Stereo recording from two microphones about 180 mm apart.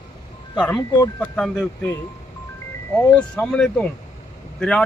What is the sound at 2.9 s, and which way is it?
Speech, 10° left (ahead or behind).